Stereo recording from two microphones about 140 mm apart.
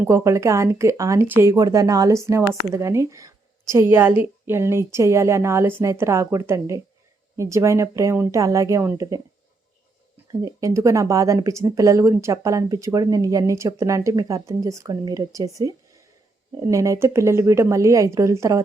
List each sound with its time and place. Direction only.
0.0 s speech: 20° right (ahead or behind)
10.4 s speech: 20° right (ahead or behind)